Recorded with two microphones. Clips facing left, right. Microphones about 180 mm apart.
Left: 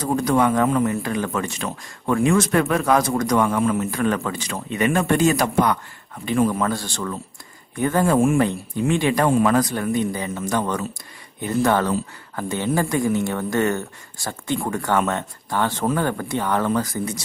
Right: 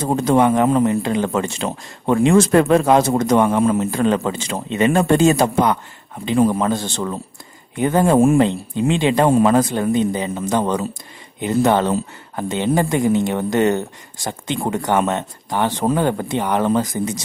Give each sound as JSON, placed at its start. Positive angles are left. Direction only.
{"t": 0.0, "sound": "speech", "side_deg": -25}
{"t": 6.6, "sound": "speech", "side_deg": -20}